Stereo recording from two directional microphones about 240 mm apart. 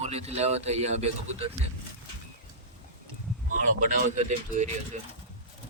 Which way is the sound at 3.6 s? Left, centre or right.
Right.